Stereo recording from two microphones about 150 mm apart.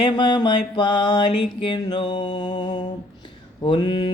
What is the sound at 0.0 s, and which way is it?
Mantra, 30° left (ahead or behind).